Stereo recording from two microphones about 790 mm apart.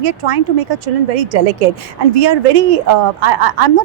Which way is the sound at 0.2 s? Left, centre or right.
Right.